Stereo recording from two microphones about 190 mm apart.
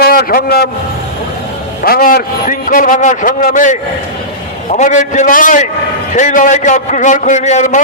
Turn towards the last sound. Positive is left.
turn(degrees=40)  # may be behind; listen again after turning